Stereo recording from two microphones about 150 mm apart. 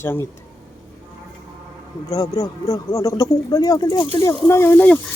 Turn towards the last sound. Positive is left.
turn(degrees=10)  # may be behind; listen again after turning